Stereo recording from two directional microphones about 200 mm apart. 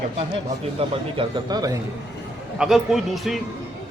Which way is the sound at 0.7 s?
25° right (ahead or behind).